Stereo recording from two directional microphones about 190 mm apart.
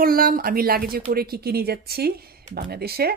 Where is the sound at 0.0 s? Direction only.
50° right (ahead or behind).